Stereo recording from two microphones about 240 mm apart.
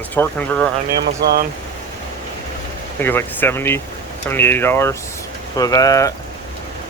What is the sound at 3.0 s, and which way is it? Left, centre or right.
Speech, centre.